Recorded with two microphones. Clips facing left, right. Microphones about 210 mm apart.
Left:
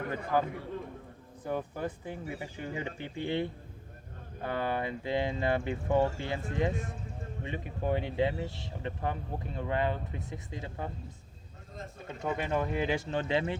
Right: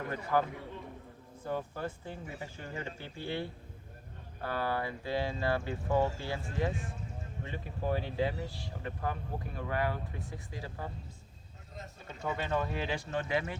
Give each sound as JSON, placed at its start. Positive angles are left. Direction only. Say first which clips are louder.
{"t": 0.3, "sound": "speech", "louder": "left 1 dB", "side_deg": 15}
{"t": 12.2, "sound": "speech", "louder": "left 2 dB", "side_deg": 15}